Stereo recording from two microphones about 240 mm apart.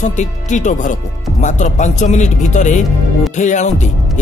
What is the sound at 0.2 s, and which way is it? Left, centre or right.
Speech, left.